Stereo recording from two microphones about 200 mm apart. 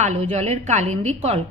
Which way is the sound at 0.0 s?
30° right (ahead or behind).